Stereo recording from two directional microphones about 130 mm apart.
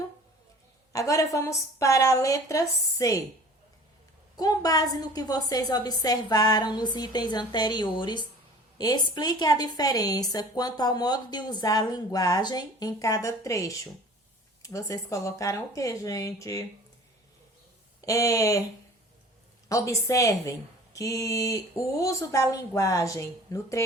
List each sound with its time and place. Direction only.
0.9 s a woman's voice: 25° left (ahead or behind)
4.4 s a woman's voice: 30° left (ahead or behind)
18.0 s a woman's voice: 25° left (ahead or behind)
19.6 s a woman's voice: 25° left (ahead or behind)